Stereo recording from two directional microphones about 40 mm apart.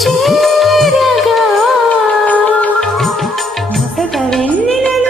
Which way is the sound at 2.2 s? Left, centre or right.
Left.